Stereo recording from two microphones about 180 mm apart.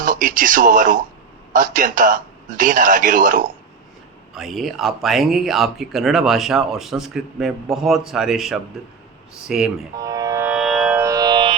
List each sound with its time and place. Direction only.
0.0 s a man's voice: 45° right (ahead or behind)
4.4 s speech: centre (ahead or behind)
10.0 s music: 20° right (ahead or behind); by 11.0 s centre (ahead or behind)
11.0 s music: 20° right (ahead or behind)